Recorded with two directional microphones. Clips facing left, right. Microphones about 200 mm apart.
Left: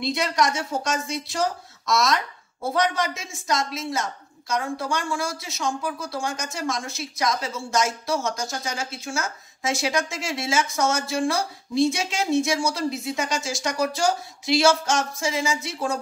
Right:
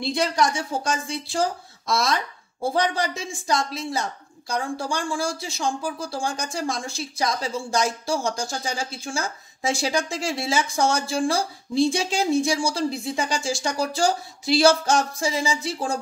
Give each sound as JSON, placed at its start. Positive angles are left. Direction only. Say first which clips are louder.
{"t": 0.1, "sound": "a woman's voice", "louder": "right 2 dB", "side_deg": -30}